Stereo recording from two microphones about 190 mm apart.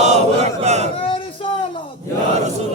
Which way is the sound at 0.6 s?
35° right (ahead or behind).